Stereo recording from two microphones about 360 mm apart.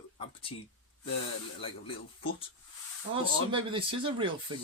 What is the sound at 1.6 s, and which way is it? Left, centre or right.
Speech, centre.